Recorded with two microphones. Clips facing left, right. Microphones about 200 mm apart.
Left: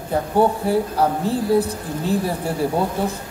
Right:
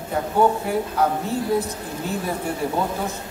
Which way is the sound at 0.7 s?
35° left (ahead or behind).